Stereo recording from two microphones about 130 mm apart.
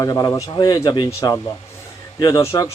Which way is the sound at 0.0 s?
25° left (ahead or behind).